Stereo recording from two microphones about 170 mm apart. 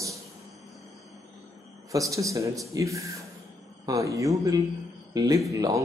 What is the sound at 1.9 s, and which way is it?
A man's voice, 20° right (ahead or behind).